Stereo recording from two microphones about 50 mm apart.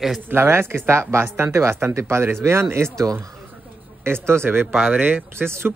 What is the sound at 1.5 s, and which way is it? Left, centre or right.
Speech, right.